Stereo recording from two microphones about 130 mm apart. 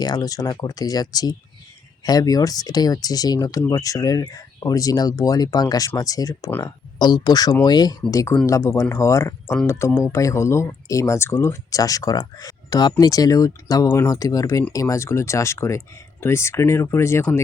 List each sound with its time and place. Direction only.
0.0 s speech: 30° left (ahead or behind)